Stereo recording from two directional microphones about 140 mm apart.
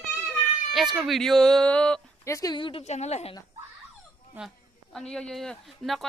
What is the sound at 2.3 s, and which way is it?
Speech, 25° left (ahead or behind).